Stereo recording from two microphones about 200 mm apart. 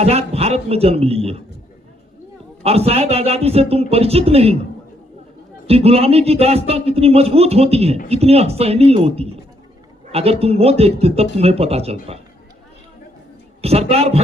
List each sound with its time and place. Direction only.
0.0 s a man's voice: 30° right (ahead or behind)
2.6 s speech: 30° right (ahead or behind)
5.6 s speech: 30° right (ahead or behind)
13.6 s speech: 30° right (ahead or behind)